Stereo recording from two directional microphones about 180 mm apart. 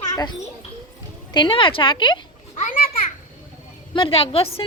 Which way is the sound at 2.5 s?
45° left (ahead or behind).